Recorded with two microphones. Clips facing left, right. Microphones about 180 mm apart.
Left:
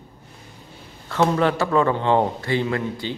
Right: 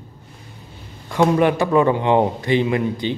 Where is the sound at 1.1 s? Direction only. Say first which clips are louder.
Right 3 dB; 15° right (ahead or behind).